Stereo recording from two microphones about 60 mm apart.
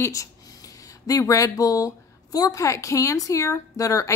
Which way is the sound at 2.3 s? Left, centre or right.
Left.